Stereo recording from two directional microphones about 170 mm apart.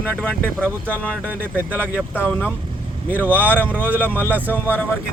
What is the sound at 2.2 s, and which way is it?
Speech, 10° left (ahead or behind).